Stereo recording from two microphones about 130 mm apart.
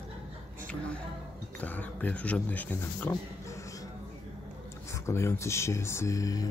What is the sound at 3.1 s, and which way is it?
Dog, 25° left (ahead or behind).